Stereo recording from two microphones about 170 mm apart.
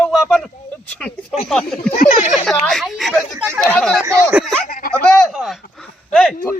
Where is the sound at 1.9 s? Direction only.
50° left (ahead or behind).